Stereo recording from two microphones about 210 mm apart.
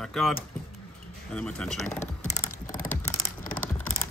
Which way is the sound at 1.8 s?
35° left (ahead or behind).